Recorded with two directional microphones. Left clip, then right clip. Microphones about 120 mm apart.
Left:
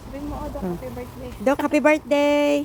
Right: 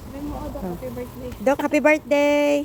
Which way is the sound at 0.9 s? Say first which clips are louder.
Right 2 dB; 40° left (ahead or behind).